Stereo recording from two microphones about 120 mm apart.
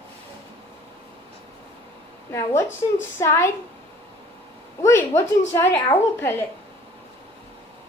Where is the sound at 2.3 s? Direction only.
20° left (ahead or behind).